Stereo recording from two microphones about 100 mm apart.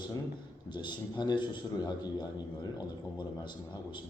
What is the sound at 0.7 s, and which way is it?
A man's voice, 50° left (ahead or behind).